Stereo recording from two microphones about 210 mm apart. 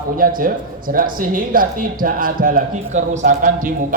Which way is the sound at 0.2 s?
40° right (ahead or behind).